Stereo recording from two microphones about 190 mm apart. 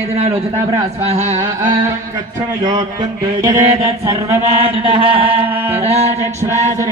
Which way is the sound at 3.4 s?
15° right (ahead or behind).